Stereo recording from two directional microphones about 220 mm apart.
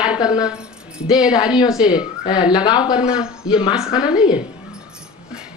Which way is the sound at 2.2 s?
20° left (ahead or behind).